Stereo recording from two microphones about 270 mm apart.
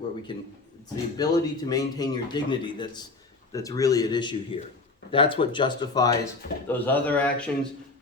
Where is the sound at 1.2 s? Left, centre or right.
Centre.